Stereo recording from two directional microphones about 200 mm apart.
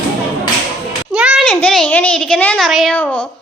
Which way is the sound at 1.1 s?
5° right (ahead or behind).